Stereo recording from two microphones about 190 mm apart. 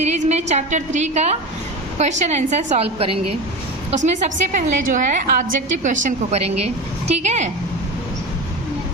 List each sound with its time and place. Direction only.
0.0 s a woman's voice: 35° right (ahead or behind)